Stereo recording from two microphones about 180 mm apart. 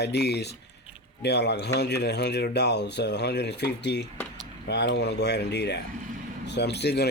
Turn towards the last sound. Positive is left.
turn(degrees=65)  # may be behind; listen again after turning